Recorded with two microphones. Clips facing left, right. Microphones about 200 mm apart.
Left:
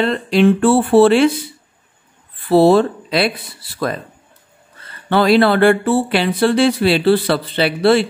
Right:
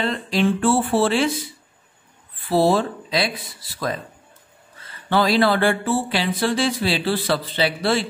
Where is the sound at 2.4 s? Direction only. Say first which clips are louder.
Left 7 dB; 65° left (ahead or behind).